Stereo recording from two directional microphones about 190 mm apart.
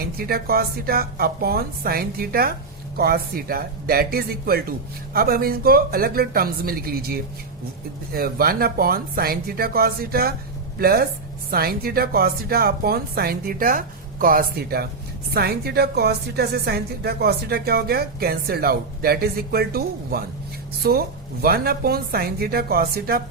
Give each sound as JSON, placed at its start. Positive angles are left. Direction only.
{"t": 0.2, "sound": "a woman's voice", "side_deg": -55}